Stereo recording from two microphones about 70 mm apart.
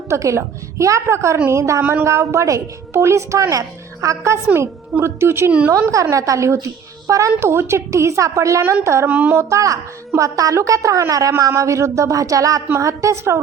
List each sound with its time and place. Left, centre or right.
0.1 s a woman's voice: right
5.5 s a woman's voice: right
5.9 s a woman's voice: right
9.0 s a woman's voice: right
9.3 s a woman's voice: right